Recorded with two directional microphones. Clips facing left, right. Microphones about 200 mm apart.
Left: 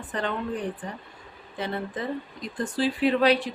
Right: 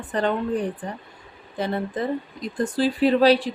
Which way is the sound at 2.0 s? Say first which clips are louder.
Right 5 dB; 40° right (ahead or behind).